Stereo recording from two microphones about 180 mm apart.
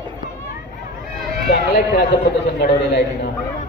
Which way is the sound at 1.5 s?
65° left (ahead or behind).